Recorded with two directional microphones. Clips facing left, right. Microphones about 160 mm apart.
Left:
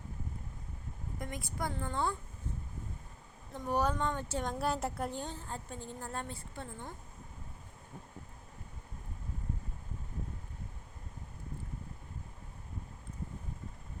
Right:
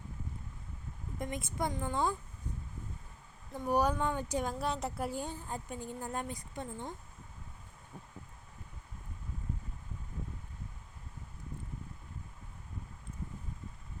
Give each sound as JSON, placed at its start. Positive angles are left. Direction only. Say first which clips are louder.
{"t": 1.2, "sound": "a woman's voice", "louder": "right 3 dB", "side_deg": -20}
{"t": 3.5, "sound": "a woman's voice", "louder": "right 2 dB", "side_deg": -10}
{"t": 4.6, "sound": "a woman's voice", "louder": "left 1 dB", "side_deg": 0}